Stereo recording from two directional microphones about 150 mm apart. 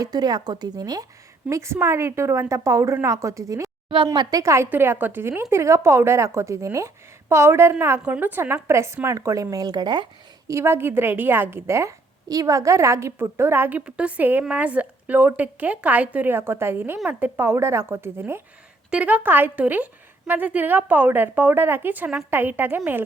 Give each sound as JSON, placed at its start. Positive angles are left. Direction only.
{"t": 0.0, "sound": "speech", "side_deg": -25}
{"t": 3.8, "sound": "speech", "side_deg": -35}
{"t": 10.5, "sound": "a woman's voice", "side_deg": -15}